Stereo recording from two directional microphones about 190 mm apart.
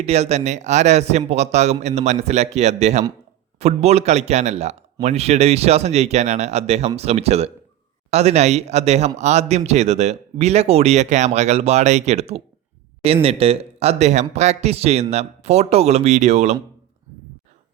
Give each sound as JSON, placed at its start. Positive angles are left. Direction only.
{"t": 0.0, "sound": "speech", "side_deg": -35}